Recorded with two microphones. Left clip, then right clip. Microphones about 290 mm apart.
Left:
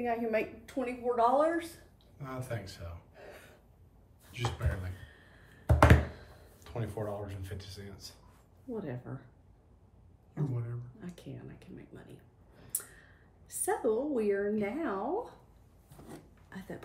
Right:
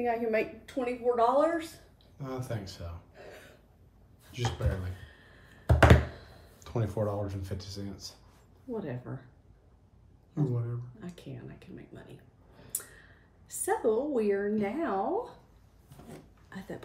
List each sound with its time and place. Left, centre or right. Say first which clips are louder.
0.0 s a woman's voice: right 3 dB; centre
4.3 s a sound: right 3 dB; centre
6.6 s a woman's voice: right 6 dB; right; by 9.2 s centre
10.3 s speech: right 6 dB; centre
16.4 s speech: right 3 dB; centre